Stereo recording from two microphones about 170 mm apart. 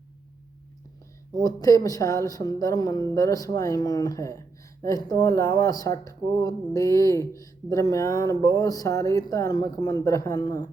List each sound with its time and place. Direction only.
1.4 s a woman's voice: 20° left (ahead or behind)